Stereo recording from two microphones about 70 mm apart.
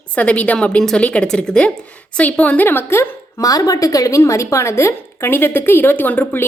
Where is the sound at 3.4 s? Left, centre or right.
Left.